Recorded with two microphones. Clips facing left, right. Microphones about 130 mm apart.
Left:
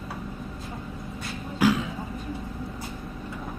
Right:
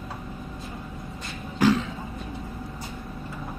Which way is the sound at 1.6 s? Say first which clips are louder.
Right 1 dB; 10° left (ahead or behind).